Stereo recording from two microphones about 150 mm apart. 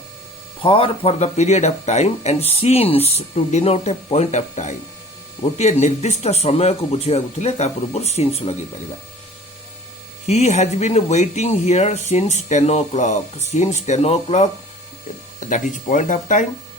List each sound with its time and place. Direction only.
0.6 s speech: 35° left (ahead or behind)
10.2 s speech: 50° left (ahead or behind)
15.4 s speech: 55° left (ahead or behind)